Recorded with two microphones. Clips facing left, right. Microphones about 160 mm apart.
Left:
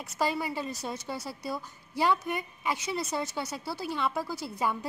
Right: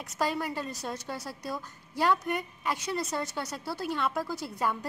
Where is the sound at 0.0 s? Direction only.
5° left (ahead or behind).